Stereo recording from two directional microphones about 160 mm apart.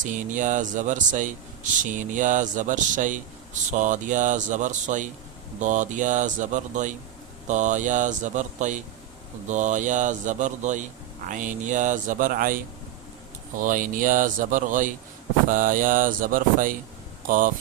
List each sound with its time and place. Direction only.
0.0 s speech: 50° right (ahead or behind)
13.6 s speech: 55° right (ahead or behind)